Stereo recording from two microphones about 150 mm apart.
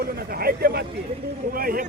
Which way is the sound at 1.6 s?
75° right (ahead or behind).